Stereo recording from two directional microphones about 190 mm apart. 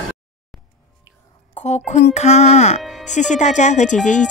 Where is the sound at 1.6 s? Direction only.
35° left (ahead or behind).